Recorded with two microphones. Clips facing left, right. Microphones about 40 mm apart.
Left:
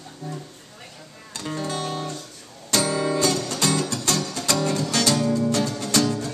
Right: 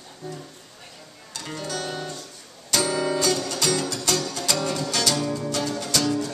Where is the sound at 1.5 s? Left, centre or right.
Left.